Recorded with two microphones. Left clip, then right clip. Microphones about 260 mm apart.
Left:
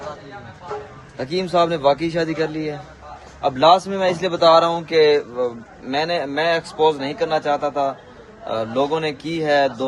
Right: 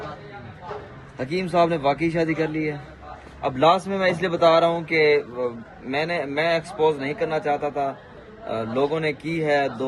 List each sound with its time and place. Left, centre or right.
1.2 s speech: centre